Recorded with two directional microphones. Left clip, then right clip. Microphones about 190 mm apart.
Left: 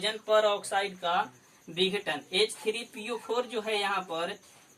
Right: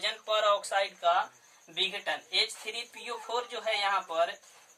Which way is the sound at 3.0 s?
25° right (ahead or behind).